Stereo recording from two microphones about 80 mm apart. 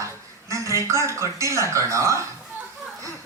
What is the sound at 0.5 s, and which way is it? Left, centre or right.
A woman's voice, right.